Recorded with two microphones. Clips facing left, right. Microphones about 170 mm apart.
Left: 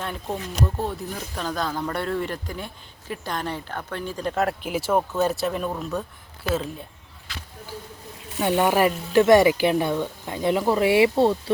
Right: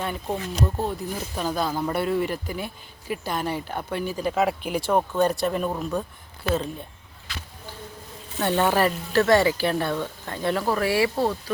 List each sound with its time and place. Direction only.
0.0 s speech: 5° right (ahead or behind)
8.4 s speech: 10° left (ahead or behind); by 11.5 s 25° left (ahead or behind)